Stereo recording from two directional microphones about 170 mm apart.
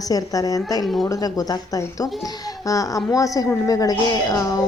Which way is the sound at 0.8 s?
Centre (ahead or behind).